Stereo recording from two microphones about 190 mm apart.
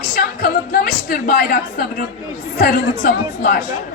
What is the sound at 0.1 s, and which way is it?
Music, 50° left (ahead or behind).